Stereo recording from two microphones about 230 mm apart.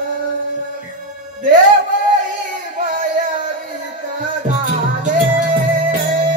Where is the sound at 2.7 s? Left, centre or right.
Right.